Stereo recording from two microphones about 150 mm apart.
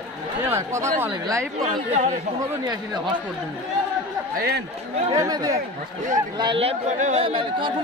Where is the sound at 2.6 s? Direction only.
25° right (ahead or behind).